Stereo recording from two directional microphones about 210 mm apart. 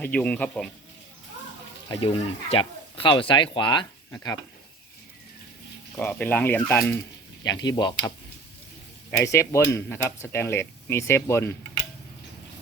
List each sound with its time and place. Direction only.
0.0 s speech: 5° left (ahead or behind)
1.9 s speech: 25° left (ahead or behind)
6.0 s speech: 5° left (ahead or behind)
9.2 s speech: 15° left (ahead or behind)